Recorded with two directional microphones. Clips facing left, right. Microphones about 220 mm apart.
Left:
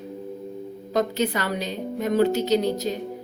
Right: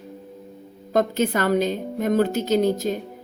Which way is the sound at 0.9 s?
50° right (ahead or behind).